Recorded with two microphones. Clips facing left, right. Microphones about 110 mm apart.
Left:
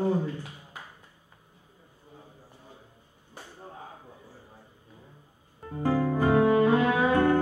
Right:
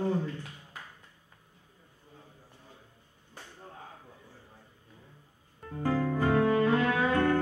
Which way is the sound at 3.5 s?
30° left (ahead or behind).